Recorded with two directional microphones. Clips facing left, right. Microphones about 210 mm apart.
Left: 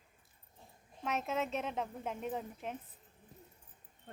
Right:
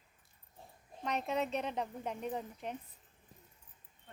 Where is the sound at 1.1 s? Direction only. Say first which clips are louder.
Right 1 dB; centre (ahead or behind).